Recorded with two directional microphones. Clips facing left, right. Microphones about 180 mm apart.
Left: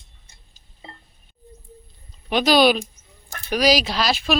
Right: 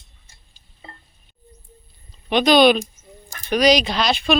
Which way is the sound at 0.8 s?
20° left (ahead or behind).